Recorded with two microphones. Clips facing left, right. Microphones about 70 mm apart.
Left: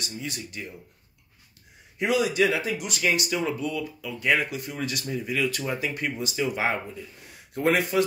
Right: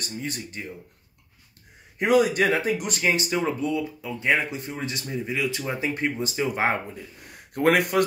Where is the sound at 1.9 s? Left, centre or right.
Right.